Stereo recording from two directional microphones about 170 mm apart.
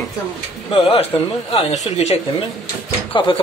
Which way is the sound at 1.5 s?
35° left (ahead or behind).